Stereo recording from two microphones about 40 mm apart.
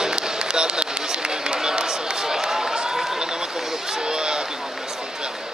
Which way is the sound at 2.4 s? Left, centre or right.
Centre.